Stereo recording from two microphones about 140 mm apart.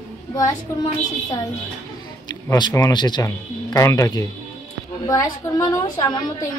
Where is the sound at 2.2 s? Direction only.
30° left (ahead or behind).